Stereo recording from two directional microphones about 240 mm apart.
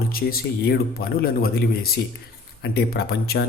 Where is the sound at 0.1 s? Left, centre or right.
Left.